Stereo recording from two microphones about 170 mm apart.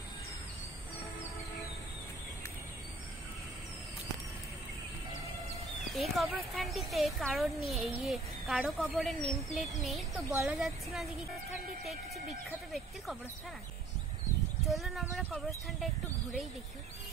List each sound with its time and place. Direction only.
5.9 s speech: centre (ahead or behind)
12.4 s speech: centre (ahead or behind)
14.7 s speech: centre (ahead or behind)